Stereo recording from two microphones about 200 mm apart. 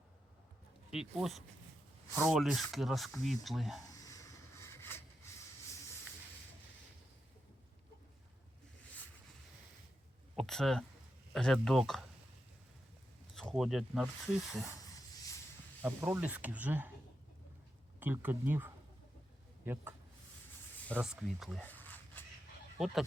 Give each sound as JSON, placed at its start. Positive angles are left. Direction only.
{"t": 0.9, "sound": "speech", "side_deg": 0}
{"t": 3.9, "sound": "a sound", "side_deg": 15}
{"t": 10.3, "sound": "speech", "side_deg": 0}
{"t": 13.3, "sound": "speech", "side_deg": 0}
{"t": 14.7, "sound": "a sound", "side_deg": 15}
{"t": 15.8, "sound": "speech", "side_deg": -10}
{"t": 18.0, "sound": "speech", "side_deg": -10}
{"t": 20.8, "sound": "speech", "side_deg": 0}